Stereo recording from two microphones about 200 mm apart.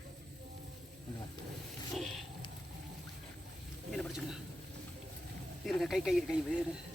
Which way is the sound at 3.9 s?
Centre (ahead or behind).